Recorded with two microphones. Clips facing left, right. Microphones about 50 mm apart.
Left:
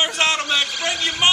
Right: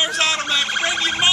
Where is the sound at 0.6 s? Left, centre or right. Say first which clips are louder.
Right 2 dB; right.